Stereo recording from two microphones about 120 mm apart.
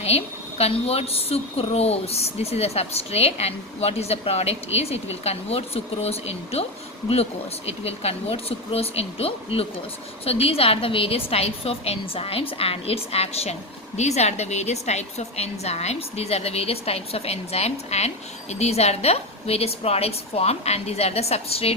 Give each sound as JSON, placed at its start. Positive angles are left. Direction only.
{"t": 0.6, "sound": "a woman's voice", "side_deg": 55}
{"t": 7.9, "sound": "a woman's voice", "side_deg": 55}